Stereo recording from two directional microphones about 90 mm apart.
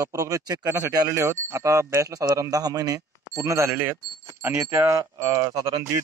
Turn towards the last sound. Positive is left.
turn(degrees=-40)  # may be behind; listen again after turning